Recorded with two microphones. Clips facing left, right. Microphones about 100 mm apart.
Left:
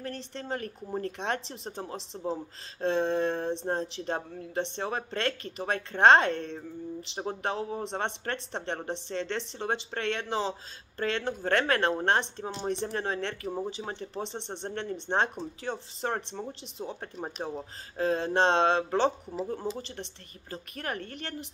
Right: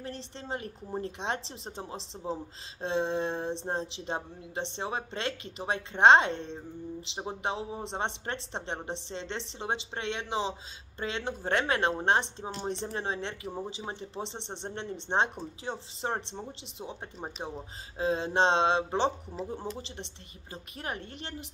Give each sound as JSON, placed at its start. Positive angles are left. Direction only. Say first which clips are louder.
{"t": 0.0, "sound": "speech", "louder": "left 3 dB", "side_deg": -20}
{"t": 17.9, "sound": "speech", "louder": "left 1 dB", "side_deg": -20}